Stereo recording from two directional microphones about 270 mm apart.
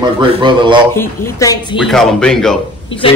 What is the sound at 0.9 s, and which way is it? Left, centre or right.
Speech, centre.